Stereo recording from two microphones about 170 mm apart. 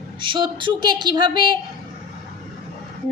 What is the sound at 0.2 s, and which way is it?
A woman's voice, 25° right (ahead or behind).